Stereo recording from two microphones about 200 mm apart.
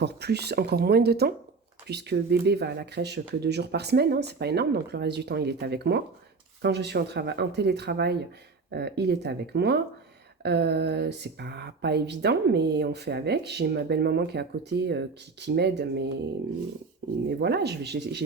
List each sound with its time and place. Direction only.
0.0 s speech: 55° right (ahead or behind)
17.2 s speech: 55° right (ahead or behind)